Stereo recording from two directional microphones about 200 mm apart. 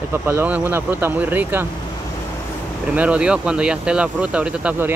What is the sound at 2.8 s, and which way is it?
Speech, 5° right (ahead or behind).